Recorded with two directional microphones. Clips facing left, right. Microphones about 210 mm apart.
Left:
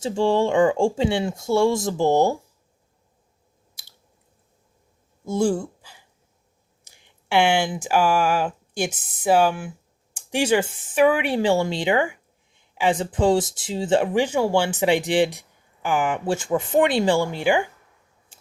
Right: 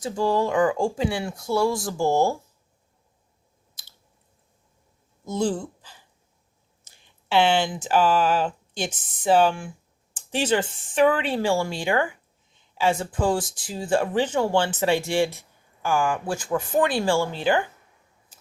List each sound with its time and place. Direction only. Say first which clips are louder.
0.0 s speech: left 3 dB; 25° left (ahead or behind)
5.2 s a sound: left 3 dB; 10° left (ahead or behind)
6.8 s speech: even; 15° left (ahead or behind)
18.3 s scissors: left 2 dB; 30° left (ahead or behind)